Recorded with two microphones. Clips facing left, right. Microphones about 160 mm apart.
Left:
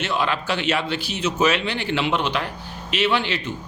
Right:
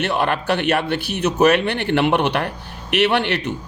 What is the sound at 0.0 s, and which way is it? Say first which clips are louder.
Speech: right 4 dB; 60° right (ahead or behind).